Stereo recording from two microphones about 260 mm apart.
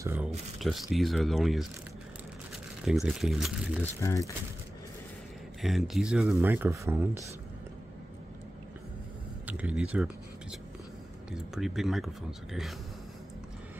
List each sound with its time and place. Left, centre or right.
0.0 s speech: centre
2.8 s speech: centre
4.0 s speech: centre
5.6 s speech: centre
9.5 s speech: centre